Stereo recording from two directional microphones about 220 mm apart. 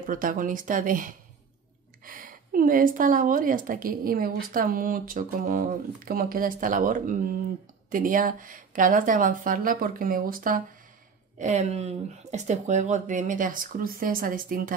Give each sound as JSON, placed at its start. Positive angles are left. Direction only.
{"t": 0.0, "sound": "a woman's voice", "side_deg": -40}